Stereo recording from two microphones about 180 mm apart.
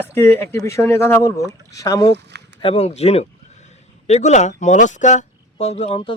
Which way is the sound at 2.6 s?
30° left (ahead or behind).